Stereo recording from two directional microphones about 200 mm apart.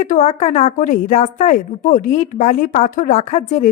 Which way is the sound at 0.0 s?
40° left (ahead or behind).